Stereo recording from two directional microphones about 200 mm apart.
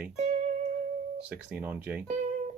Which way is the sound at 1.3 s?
10° right (ahead or behind).